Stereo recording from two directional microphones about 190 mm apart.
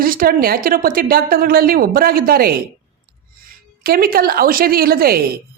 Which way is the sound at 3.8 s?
50° right (ahead or behind).